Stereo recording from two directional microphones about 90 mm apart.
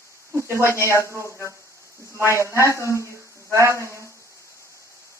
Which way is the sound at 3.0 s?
35° right (ahead or behind).